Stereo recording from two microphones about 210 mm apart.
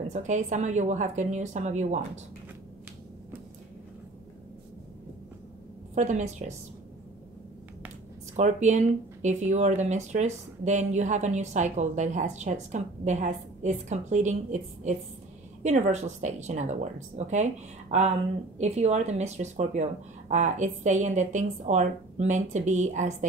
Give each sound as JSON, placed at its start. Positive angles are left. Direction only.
{"t": 0.1, "sound": "speech", "side_deg": -35}
{"t": 5.9, "sound": "speech", "side_deg": -35}
{"t": 8.4, "sound": "speech", "side_deg": -35}